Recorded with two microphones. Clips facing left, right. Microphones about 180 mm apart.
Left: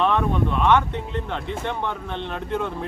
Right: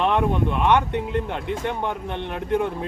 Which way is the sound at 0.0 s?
15° right (ahead or behind).